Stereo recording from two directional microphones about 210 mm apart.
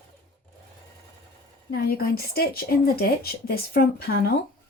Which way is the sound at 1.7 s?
45° left (ahead or behind).